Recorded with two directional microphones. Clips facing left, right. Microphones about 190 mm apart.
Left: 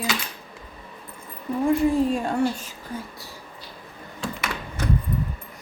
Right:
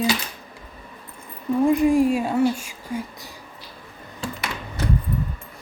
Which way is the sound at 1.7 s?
15° right (ahead or behind).